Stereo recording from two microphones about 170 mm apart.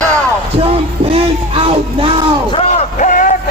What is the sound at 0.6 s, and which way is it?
Music, 35° right (ahead or behind).